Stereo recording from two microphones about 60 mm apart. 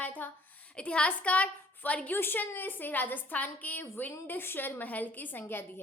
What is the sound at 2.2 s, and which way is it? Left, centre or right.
A woman's voice, left.